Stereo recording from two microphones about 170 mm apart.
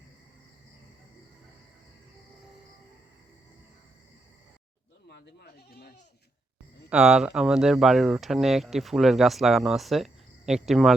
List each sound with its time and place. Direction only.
5.0 s speech: 85° left
6.9 s speech: 5° right (ahead or behind)